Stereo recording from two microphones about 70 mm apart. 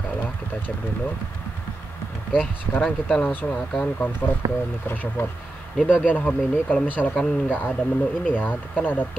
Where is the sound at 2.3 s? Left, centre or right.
Left.